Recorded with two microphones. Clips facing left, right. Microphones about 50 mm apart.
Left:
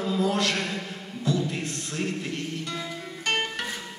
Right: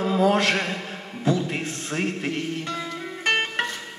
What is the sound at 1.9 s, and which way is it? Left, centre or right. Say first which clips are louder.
Speech: right 4 dB; right.